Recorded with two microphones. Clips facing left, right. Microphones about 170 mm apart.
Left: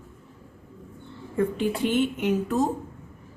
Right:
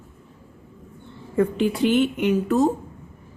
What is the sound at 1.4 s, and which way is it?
A woman's voice, 90° right.